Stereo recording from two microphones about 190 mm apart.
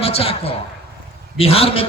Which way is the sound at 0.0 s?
30° left (ahead or behind).